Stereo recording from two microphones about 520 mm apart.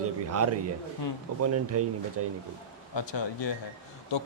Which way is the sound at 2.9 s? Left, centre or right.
Left.